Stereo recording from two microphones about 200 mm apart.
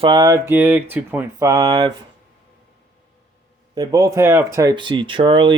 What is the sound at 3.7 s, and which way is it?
Speech, 15° right (ahead or behind).